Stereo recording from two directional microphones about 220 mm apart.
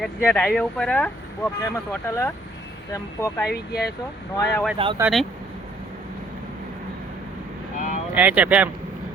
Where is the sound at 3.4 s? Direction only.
45° left (ahead or behind).